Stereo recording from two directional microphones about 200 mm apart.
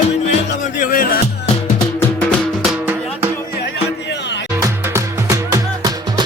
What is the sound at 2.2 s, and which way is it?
Music, centre (ahead or behind).